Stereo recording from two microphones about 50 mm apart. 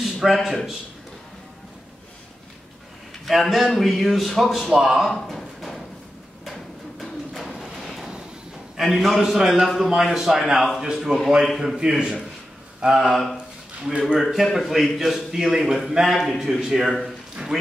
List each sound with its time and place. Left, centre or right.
0.0 s a man's voice: centre
3.3 s a man's voice: centre
4.7 s a sound: centre
7.0 s a sound: centre
7.7 s vehicle: centre
8.7 s a man's voice: centre
11.8 s a man's voice: centre
14.0 s a man's voice: centre